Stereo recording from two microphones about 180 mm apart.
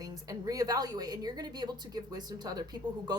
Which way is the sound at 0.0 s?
20° right (ahead or behind).